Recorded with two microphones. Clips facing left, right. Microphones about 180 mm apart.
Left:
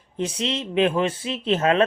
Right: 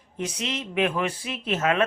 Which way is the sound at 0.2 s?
30° left (ahead or behind).